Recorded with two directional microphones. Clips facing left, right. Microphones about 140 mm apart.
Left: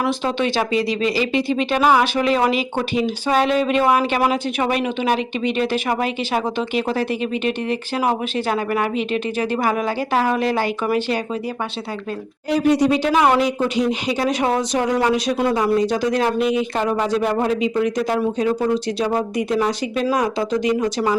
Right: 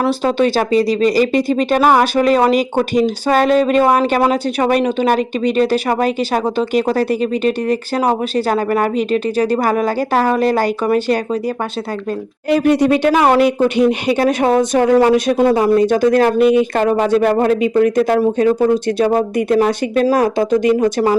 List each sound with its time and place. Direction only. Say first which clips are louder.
0.0 s speech: right 6 dB; 40° right (ahead or behind)
12.5 s speech: right 4 dB; 60° right (ahead or behind)